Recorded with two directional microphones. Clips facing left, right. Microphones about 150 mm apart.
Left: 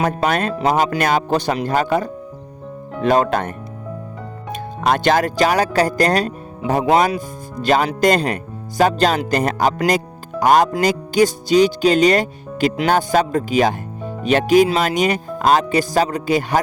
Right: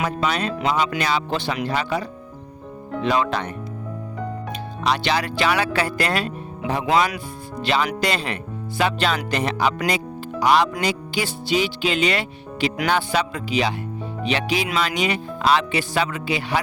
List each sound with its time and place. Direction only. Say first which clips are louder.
0.0 s speech: left 5 dB; 50° left (ahead or behind)
4.5 s speech: left 5 dB; 50° left (ahead or behind)